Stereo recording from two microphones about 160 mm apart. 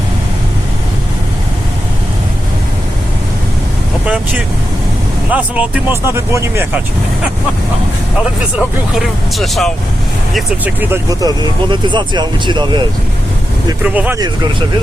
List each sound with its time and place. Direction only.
5.3 s speech: 10° right (ahead or behind)
8.5 s speech: centre (ahead or behind)
10.8 s speech: 20° right (ahead or behind)
13.8 s speech: 10° right (ahead or behind)